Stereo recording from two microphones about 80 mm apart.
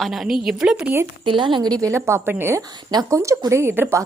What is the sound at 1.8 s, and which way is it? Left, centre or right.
A woman's voice, right.